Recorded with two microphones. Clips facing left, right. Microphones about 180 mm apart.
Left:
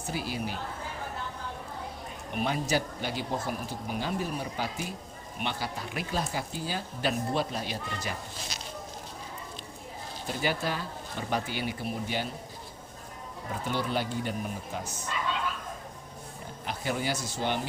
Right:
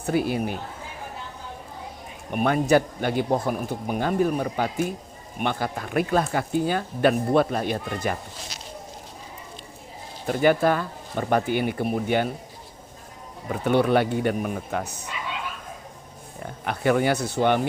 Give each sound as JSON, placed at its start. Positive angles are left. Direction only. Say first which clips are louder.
{"t": 0.0, "sound": "speech", "louder": "right 10 dB", "side_deg": -55}
{"t": 2.3, "sound": "speech", "louder": "right 9 dB", "side_deg": -55}
{"t": 10.2, "sound": "speech", "louder": "right 11 dB", "side_deg": -55}
{"t": 13.5, "sound": "speech", "louder": "right 11 dB", "side_deg": -60}
{"t": 16.6, "sound": "speech", "louder": "right 10 dB", "side_deg": -60}